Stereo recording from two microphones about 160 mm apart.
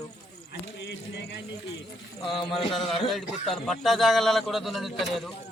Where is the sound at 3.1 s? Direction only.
Centre (ahead or behind).